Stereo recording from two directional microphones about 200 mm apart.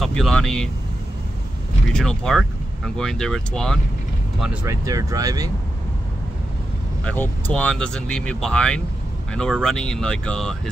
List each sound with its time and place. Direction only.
0.0 s speech: centre (ahead or behind)
1.9 s speech: 5° left (ahead or behind)
4.6 s speech: 15° right (ahead or behind)
7.1 s speech: 10° left (ahead or behind)